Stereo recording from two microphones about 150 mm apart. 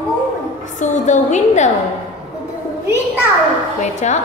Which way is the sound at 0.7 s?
55° left (ahead or behind).